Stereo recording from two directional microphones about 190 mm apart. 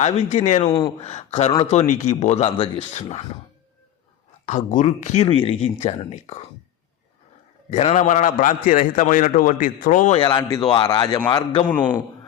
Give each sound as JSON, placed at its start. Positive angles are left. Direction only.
{"t": 0.0, "sound": "speech", "side_deg": 35}
{"t": 4.4, "sound": "speech", "side_deg": 40}
{"t": 7.7, "sound": "a man's voice", "side_deg": 35}
{"t": 10.2, "sound": "speech", "side_deg": 25}
{"t": 11.6, "sound": "a man's voice", "side_deg": 10}